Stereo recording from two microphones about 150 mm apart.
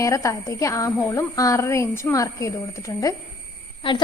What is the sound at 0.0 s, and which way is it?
A woman's voice, 20° left (ahead or behind).